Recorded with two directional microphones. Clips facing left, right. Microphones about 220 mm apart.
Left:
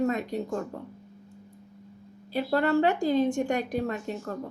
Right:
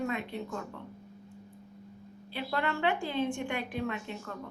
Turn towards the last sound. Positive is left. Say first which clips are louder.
# left 6 dB
turn(degrees=40)  # may be behind; listen again after turning